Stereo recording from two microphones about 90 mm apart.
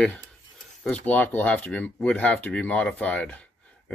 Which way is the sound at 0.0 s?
15° left (ahead or behind).